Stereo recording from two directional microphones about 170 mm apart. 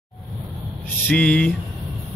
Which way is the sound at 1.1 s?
5° left (ahead or behind).